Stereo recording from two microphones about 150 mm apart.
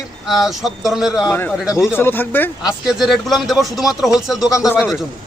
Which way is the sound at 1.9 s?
15° left (ahead or behind).